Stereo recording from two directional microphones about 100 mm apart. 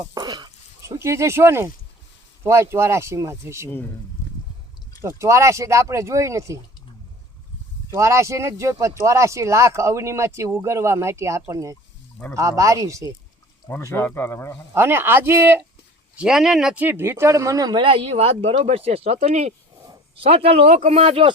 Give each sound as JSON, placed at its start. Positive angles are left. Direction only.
{"t": 0.1, "sound": "a sound", "side_deg": -45}
{"t": 0.8, "sound": "speech", "side_deg": -30}
{"t": 5.0, "sound": "speech", "side_deg": -30}
{"t": 7.9, "sound": "speech", "side_deg": -30}
{"t": 13.7, "sound": "speech", "side_deg": 20}
{"t": 14.7, "sound": "speech", "side_deg": -20}
{"t": 16.1, "sound": "speech", "side_deg": -5}
{"t": 16.8, "sound": "speech", "side_deg": -20}
{"t": 17.7, "sound": "speech", "side_deg": -65}
{"t": 20.1, "sound": "speech", "side_deg": -75}